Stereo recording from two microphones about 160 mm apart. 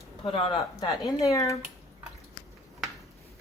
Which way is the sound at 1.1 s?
20° left (ahead or behind).